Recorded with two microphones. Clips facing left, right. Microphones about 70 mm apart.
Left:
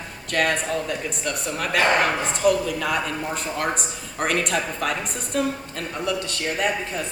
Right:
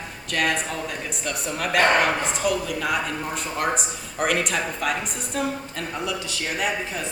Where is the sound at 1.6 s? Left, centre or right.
Right.